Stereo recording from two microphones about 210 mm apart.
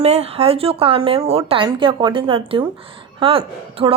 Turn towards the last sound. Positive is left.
turn(degrees=-25)  # may be behind; listen again after turning